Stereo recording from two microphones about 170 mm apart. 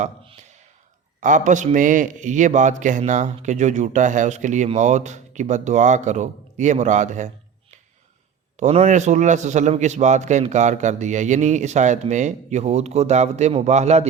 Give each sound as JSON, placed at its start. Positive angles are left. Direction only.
{"t": 1.2, "sound": "a man's voice", "side_deg": -45}
{"t": 8.5, "sound": "a man's voice", "side_deg": -45}